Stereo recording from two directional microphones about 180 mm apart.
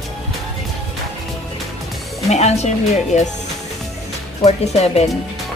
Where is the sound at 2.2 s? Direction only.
40° left (ahead or behind).